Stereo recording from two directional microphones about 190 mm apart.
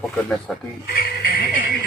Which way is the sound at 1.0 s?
50° left (ahead or behind).